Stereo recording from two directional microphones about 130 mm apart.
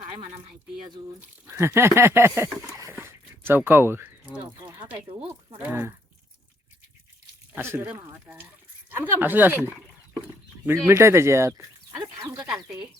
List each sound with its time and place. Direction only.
1.5 s speech: 20° right (ahead or behind)
2.6 s a sound: 20° right (ahead or behind)
4.7 s speech: 15° right (ahead or behind)
7.5 s speech: 15° right (ahead or behind)
9.7 s livestock: 5° right (ahead or behind)
10.7 s speech: 20° right (ahead or behind)